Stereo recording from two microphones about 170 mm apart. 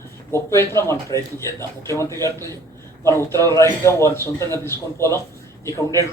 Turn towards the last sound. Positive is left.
turn(degrees=20)  # may be behind; listen again after turning